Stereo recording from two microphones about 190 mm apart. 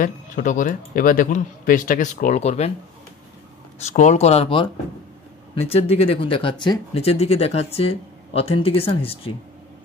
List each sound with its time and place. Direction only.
0.0 s speech: 45° left (ahead or behind)
3.8 s speech: 40° left (ahead or behind)